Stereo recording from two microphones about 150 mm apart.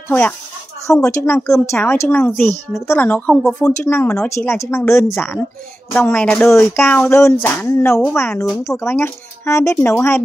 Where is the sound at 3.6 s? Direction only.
15° left (ahead or behind).